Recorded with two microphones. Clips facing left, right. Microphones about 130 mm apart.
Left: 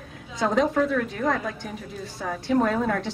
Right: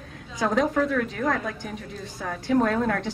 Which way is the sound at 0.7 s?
Centre (ahead or behind).